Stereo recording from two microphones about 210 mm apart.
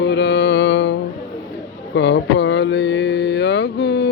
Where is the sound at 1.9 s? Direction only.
60° left (ahead or behind).